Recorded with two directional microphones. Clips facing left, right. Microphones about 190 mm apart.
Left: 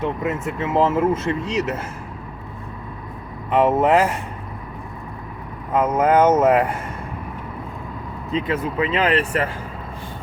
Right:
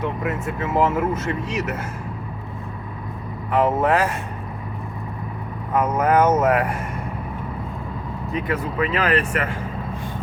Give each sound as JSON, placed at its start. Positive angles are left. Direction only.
{"t": 0.0, "sound": "speech", "side_deg": 25}
{"t": 3.5, "sound": "speech", "side_deg": 20}
{"t": 5.7, "sound": "speech", "side_deg": 25}
{"t": 8.3, "sound": "speech", "side_deg": 20}